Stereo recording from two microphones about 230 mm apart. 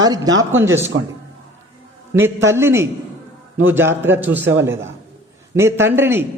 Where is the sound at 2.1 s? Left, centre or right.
Centre.